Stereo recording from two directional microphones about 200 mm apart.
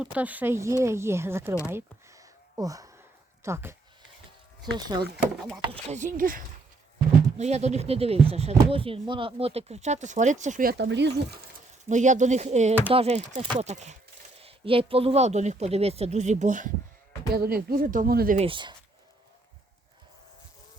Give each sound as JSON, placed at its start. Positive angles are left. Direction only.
{"t": 0.0, "sound": "speech", "side_deg": -5}
{"t": 1.6, "sound": "a sound", "side_deg": -15}
{"t": 3.4, "sound": "speech", "side_deg": -10}
{"t": 5.6, "sound": "speech", "side_deg": -30}
{"t": 6.1, "sound": "speech", "side_deg": -45}
{"t": 11.9, "sound": "speech", "side_deg": -35}
{"t": 18.3, "sound": "speech", "side_deg": -25}